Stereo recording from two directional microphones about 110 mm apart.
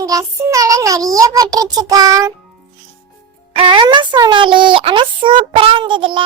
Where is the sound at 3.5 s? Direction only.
50° right (ahead or behind).